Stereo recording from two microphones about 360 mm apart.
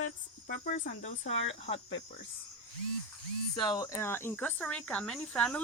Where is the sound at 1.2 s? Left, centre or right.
Left.